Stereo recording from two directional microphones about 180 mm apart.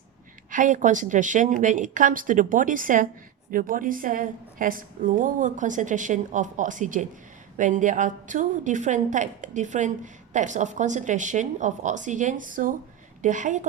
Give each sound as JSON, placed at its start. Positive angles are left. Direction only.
{"t": 0.5, "sound": "a woman's voice", "side_deg": -45}